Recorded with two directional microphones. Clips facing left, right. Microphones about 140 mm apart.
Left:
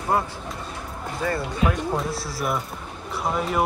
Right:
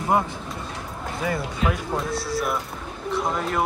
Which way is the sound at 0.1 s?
20° right (ahead or behind).